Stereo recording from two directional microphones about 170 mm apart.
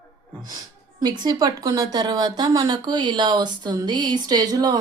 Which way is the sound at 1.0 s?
25° right (ahead or behind).